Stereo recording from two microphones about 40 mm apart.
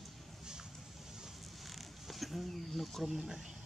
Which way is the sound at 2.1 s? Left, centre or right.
Centre.